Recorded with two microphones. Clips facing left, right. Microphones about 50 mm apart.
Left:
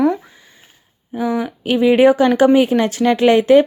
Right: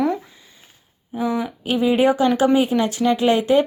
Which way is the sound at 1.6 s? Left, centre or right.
Left.